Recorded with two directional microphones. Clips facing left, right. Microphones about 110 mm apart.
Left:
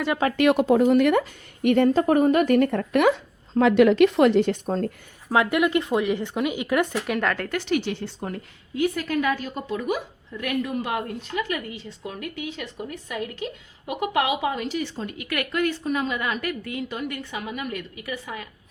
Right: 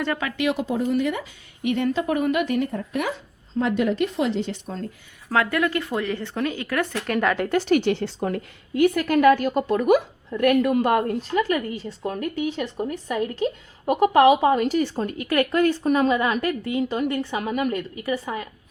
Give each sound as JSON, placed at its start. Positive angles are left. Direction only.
{"t": 0.3, "sound": "a woman's voice", "side_deg": 60}
{"t": 3.6, "sound": "speech", "side_deg": 90}
{"t": 5.3, "sound": "speech", "side_deg": 15}
{"t": 6.9, "sound": "speech", "side_deg": 0}
{"t": 7.3, "sound": "a woman's voice", "side_deg": -20}
{"t": 7.7, "sound": "a woman's voice", "side_deg": -55}
{"t": 8.0, "sound": "a woman's voice", "side_deg": -75}
{"t": 10.8, "sound": "a woman's voice", "side_deg": -45}
{"t": 16.1, "sound": "a woman's voice", "side_deg": -30}
{"t": 17.4, "sound": "a woman's voice", "side_deg": -45}